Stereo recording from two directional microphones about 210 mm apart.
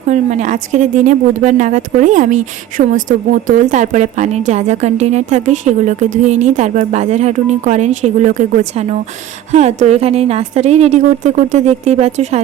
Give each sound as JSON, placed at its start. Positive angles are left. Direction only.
{"t": 0.1, "sound": "a woman's voice", "side_deg": -35}